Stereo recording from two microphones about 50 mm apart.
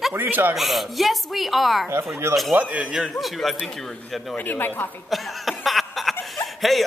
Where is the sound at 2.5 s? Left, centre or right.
Right.